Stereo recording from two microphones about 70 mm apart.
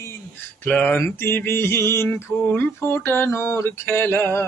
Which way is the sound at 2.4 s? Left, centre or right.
Left.